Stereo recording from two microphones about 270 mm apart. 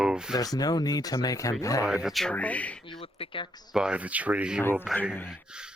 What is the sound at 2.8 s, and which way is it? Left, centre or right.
Speech, centre.